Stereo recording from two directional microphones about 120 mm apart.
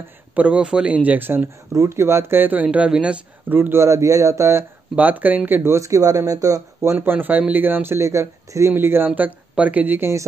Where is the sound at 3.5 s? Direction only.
20° right (ahead or behind).